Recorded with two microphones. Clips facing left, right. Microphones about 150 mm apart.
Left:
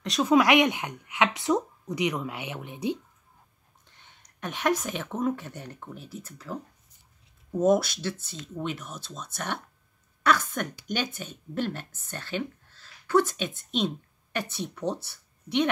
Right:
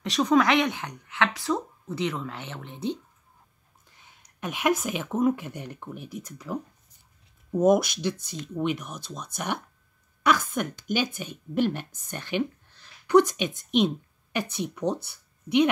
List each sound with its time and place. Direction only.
0.0 s a woman's voice: centre (ahead or behind)
3.8 s a woman's voice: 5° right (ahead or behind)